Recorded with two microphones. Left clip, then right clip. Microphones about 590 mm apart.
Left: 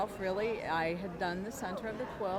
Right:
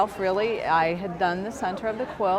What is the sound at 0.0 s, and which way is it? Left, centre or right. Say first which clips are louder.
A woman's voice: right 11 dB; right.